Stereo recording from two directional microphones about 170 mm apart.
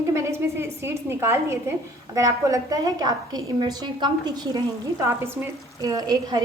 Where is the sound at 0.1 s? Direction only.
15° right (ahead or behind).